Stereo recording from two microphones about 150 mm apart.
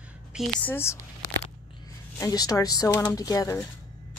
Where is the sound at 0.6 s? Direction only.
15° left (ahead or behind).